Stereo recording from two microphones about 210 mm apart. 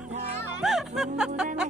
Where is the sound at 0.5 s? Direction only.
Centre (ahead or behind).